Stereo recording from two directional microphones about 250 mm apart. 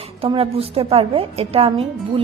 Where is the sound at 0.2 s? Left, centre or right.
Right.